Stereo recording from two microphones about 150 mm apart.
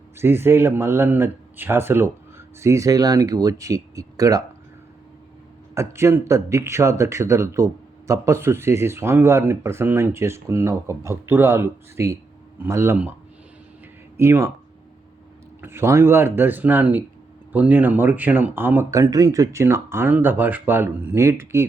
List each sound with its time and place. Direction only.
0.2 s speech: 15° right (ahead or behind)
5.7 s speech: 20° right (ahead or behind)
14.2 s speech: 15° right (ahead or behind)
15.6 s speech: 15° right (ahead or behind)